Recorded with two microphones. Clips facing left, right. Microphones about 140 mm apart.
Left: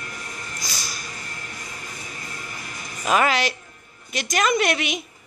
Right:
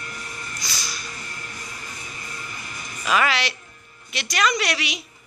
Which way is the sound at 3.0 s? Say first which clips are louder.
Left 2 dB; 45° left (ahead or behind).